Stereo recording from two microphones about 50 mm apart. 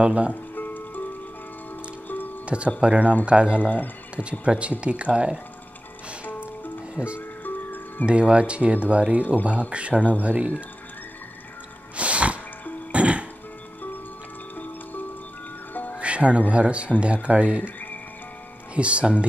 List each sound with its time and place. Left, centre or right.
0.0 s speech: right
0.3 s music: left
2.4 s speech: right
3.6 s speech: left
4.2 s speech: right
7.2 s music: left
8.0 s speech: right
12.0 s music: right
16.0 s speech: right
18.8 s speech: right